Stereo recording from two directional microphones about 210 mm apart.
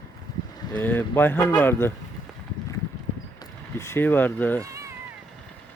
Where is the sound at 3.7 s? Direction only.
10° left (ahead or behind).